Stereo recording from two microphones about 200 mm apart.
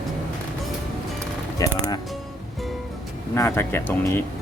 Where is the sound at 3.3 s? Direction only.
10° left (ahead or behind).